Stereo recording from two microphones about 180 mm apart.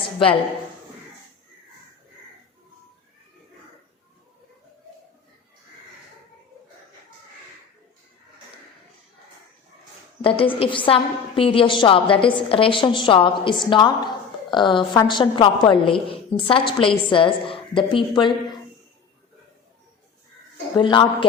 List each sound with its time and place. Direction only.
10.2 s a woman's voice: 30° left (ahead or behind)
20.7 s a woman's voice: 25° left (ahead or behind)